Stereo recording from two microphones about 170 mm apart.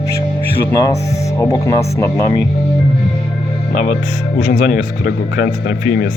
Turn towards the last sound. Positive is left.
turn(degrees=60)  # may be behind; listen again after turning